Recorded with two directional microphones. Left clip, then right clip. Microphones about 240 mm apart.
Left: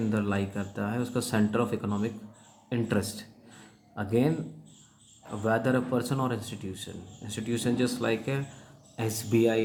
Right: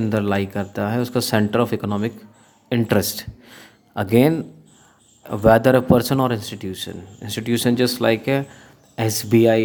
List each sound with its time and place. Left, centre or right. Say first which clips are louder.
0.1 s speech: right 9 dB; right
2.6 s a sound: right 11 dB; right
5.3 s speech: right 13 dB; right